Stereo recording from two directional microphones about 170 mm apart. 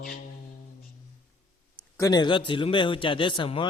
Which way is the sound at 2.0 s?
25° left (ahead or behind).